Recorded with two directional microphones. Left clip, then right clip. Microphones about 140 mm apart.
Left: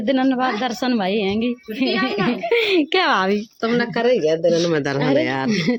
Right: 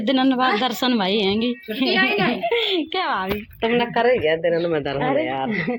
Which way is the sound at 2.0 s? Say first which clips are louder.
Right 2 dB; 35° left (ahead or behind).